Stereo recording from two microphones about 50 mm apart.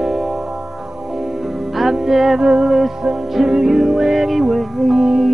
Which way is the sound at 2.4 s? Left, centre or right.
Centre.